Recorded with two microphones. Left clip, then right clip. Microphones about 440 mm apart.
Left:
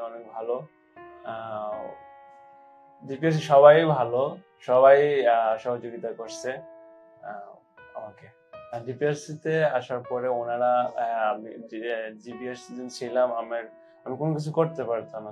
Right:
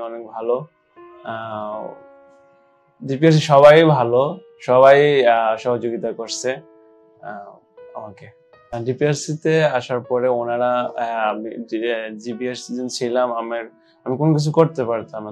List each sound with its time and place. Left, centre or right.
0.0 s speech: right
3.1 s speech: right
8.8 s speech: right